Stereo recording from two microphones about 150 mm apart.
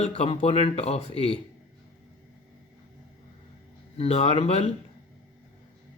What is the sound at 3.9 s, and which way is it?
Speech, 40° left (ahead or behind).